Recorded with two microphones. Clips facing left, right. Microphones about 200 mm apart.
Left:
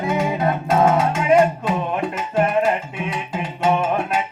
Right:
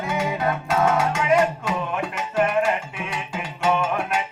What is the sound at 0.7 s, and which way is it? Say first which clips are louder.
Music: left 4 dB; 25° left (ahead or behind).